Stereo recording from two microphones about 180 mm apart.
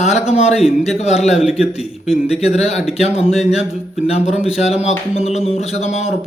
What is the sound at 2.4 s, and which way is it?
A man's voice, 35° left (ahead or behind).